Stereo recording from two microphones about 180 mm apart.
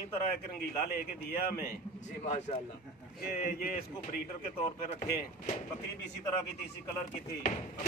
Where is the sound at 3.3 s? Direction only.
55° left (ahead or behind).